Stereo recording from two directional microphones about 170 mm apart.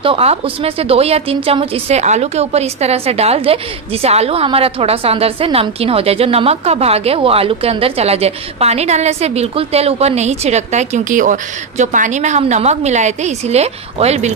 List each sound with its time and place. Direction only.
0.0 s a woman's voice: 35° right (ahead or behind)